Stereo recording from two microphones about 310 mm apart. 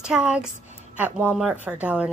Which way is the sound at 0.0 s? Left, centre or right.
Centre.